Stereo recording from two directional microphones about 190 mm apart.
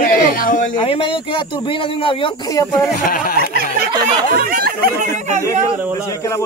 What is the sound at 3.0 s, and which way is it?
Speech, 50° left (ahead or behind).